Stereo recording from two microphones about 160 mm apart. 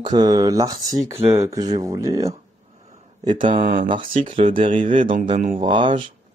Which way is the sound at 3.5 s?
60° right (ahead or behind).